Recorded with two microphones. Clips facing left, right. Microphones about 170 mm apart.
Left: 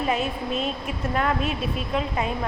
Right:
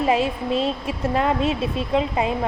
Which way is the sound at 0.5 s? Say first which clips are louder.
Right 5 dB; 30° right (ahead or behind).